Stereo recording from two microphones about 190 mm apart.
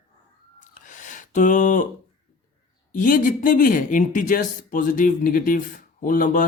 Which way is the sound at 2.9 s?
40° left (ahead or behind).